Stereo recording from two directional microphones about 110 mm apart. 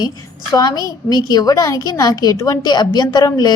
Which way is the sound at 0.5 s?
35° left (ahead or behind).